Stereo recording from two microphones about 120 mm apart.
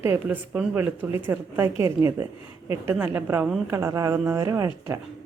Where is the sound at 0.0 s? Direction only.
20° right (ahead or behind).